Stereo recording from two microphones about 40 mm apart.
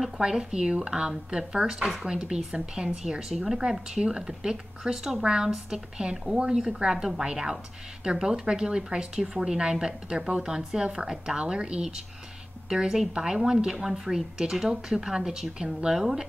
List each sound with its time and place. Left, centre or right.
0.2 s a woman's voice: centre